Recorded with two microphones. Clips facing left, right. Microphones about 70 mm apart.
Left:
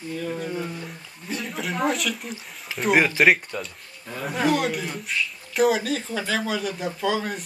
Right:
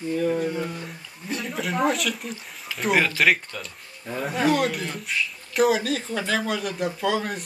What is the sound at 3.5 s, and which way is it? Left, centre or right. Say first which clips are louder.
Speech: left 4 dB; left.